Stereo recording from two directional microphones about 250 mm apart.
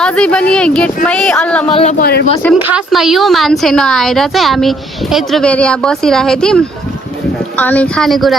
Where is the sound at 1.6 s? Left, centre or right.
Left.